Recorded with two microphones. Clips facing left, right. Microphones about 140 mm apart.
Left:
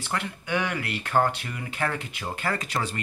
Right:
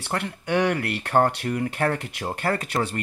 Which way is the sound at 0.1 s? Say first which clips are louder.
Right 4 dB; 60° right (ahead or behind).